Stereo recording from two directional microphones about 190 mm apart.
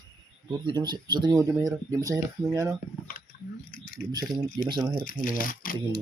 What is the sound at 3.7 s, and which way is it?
Speech, 45° left (ahead or behind).